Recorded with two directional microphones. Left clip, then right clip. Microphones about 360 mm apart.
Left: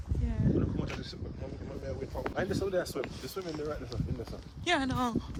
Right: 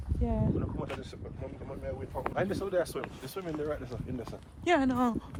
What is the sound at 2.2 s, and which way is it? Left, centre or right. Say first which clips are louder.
Speech: right 1 dB; right.